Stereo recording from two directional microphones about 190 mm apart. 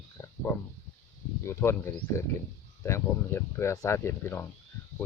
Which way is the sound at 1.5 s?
10° left (ahead or behind).